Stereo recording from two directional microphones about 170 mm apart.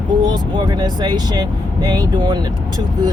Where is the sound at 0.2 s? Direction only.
25° right (ahead or behind).